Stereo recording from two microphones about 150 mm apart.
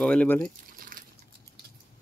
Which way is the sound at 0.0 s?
5° left (ahead or behind).